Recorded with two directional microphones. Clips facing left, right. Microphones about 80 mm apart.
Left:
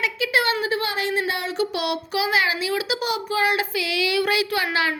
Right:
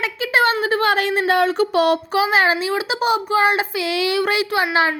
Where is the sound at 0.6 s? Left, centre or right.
Right.